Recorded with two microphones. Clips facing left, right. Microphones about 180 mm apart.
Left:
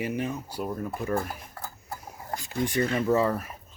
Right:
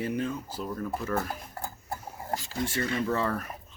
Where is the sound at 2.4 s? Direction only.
20° left (ahead or behind).